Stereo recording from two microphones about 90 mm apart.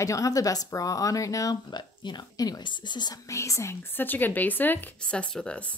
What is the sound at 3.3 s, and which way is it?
Speech, 35° left (ahead or behind).